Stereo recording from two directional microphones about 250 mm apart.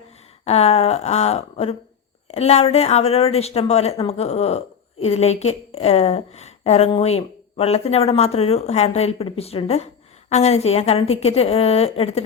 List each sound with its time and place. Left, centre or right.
0.4 s speech: left